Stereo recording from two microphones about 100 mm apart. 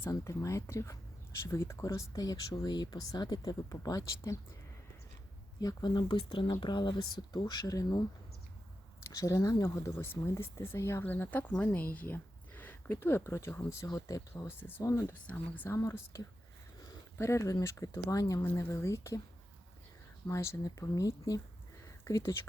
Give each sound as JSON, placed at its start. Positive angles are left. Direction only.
{"t": 0.1, "sound": "speech", "side_deg": 30}
{"t": 5.5, "sound": "speech", "side_deg": 45}
{"t": 9.0, "sound": "speech", "side_deg": 30}
{"t": 14.5, "sound": "speech", "side_deg": 20}
{"t": 18.4, "sound": "speech", "side_deg": 25}
{"t": 20.2, "sound": "speech", "side_deg": 30}
{"t": 21.8, "sound": "a sound", "side_deg": 30}